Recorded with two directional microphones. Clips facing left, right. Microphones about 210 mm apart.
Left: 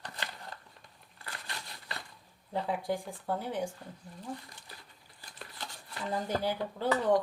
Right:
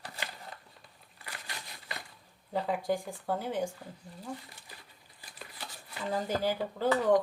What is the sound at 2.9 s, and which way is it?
Speech, 40° right (ahead or behind).